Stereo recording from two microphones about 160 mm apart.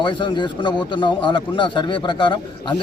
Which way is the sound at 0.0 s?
30° left (ahead or behind).